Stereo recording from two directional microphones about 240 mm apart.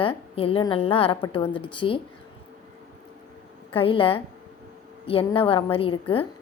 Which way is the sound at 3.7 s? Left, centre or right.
Left.